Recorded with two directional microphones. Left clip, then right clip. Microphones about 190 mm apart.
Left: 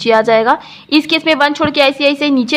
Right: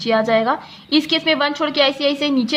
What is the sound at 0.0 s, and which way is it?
A woman's voice, 35° left (ahead or behind).